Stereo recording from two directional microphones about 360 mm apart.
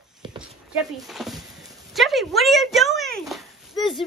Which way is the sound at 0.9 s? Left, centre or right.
Centre.